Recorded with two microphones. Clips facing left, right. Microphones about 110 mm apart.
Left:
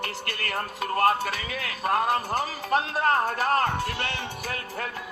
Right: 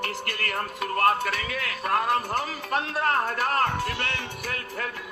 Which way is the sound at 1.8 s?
25° left (ahead or behind).